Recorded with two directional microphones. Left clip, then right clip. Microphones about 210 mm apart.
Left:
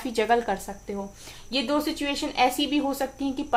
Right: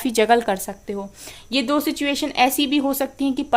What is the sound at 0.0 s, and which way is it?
A woman's voice, 50° right (ahead or behind).